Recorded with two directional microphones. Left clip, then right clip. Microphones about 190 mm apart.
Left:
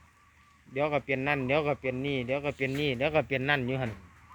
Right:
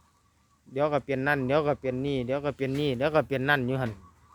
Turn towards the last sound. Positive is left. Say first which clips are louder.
# right 3 dB
turn(degrees=-25)  # may be behind; listen again after turning